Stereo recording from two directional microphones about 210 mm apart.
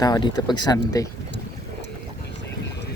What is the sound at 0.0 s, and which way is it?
Speech, 20° left (ahead or behind).